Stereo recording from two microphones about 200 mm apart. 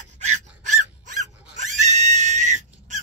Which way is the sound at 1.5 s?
35° right (ahead or behind).